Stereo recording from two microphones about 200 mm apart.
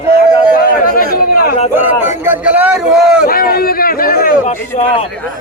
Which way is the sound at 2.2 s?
10° right (ahead or behind).